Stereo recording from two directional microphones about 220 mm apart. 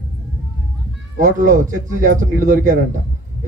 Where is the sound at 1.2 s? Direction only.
35° right (ahead or behind).